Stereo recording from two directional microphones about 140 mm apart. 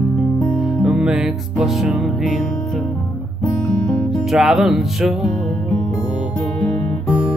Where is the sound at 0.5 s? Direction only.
5° right (ahead or behind).